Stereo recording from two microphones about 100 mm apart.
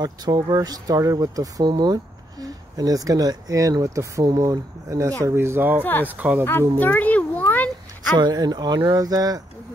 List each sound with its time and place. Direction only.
0.0 s speech: 40° right (ahead or behind); by 6.4 s 15° right (ahead or behind)
6.8 s a sound: 15° left (ahead or behind)
8.2 s speech: 40° right (ahead or behind)